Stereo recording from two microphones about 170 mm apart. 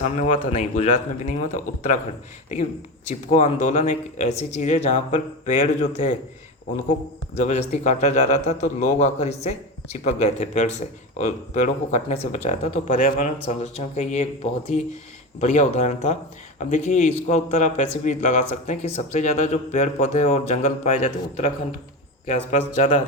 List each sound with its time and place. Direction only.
0.2 s a man's voice: 40° left (ahead or behind)
3.1 s a man's voice: 45° left (ahead or behind)
7.3 s a man's voice: 40° left (ahead or behind)
13.0 s a man's voice: 55° left (ahead or behind)
15.4 s a man's voice: 45° left (ahead or behind)